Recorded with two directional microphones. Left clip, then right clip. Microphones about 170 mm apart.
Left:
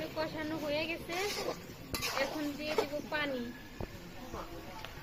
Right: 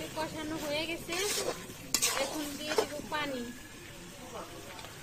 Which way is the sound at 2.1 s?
30° right (ahead or behind).